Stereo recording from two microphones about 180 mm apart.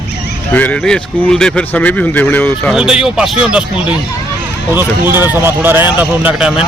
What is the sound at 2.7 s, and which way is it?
Speech, 5° right (ahead or behind).